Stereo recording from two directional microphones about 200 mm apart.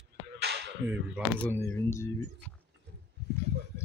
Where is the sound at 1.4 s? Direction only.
10° left (ahead or behind).